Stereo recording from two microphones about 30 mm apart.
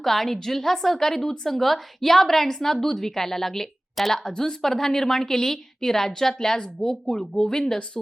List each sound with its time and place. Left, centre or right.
0.0 s a woman's voice: centre
7.1 s speech: left
7.5 s speech: centre